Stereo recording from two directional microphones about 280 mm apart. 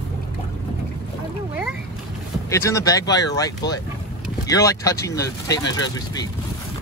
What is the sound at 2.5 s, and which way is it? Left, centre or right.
Speech, centre.